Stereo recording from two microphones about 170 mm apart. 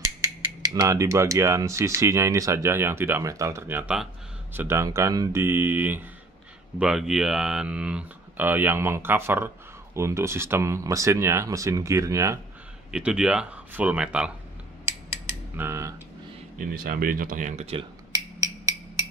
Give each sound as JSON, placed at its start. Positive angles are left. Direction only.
{"t": 0.7, "sound": "speech", "side_deg": -20}
{"t": 12.9, "sound": "speech", "side_deg": -5}
{"t": 15.5, "sound": "speech", "side_deg": -15}
{"t": 16.5, "sound": "speech", "side_deg": -60}